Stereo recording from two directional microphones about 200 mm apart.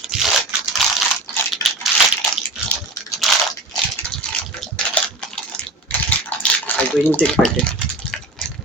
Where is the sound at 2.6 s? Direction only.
5° right (ahead or behind).